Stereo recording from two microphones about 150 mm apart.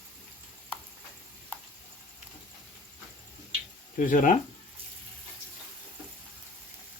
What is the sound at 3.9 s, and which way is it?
Speech, 60° left (ahead or behind).